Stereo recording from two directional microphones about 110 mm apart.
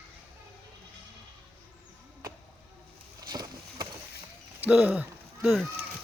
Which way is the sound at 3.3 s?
35° right (ahead or behind).